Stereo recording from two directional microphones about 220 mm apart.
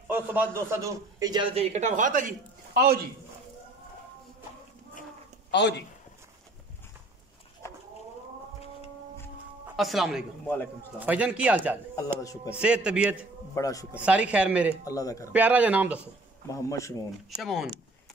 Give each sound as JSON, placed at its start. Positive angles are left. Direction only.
{"t": 0.1, "sound": "a man's voice", "side_deg": -10}
{"t": 5.5, "sound": "a man's voice", "side_deg": 50}
{"t": 9.8, "sound": "speech", "side_deg": 0}
{"t": 10.4, "sound": "speech", "side_deg": 10}
{"t": 11.0, "sound": "a man's voice", "side_deg": -5}
{"t": 12.2, "sound": "speech", "side_deg": 15}
{"t": 12.5, "sound": "speech", "side_deg": -5}
{"t": 13.6, "sound": "speech", "side_deg": 15}
{"t": 14.0, "sound": "speech", "side_deg": -5}
{"t": 14.9, "sound": "speech", "side_deg": 15}
{"t": 15.3, "sound": "a man's voice", "side_deg": -5}
{"t": 16.4, "sound": "speech", "side_deg": 15}
{"t": 17.4, "sound": "speech", "side_deg": 0}